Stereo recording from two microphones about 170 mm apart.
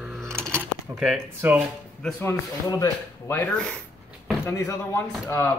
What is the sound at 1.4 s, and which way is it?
Speech, 10° right (ahead or behind).